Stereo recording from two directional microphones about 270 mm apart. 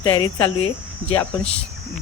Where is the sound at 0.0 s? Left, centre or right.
Centre.